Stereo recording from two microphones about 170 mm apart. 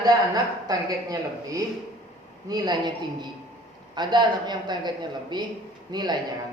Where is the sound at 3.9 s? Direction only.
25° right (ahead or behind).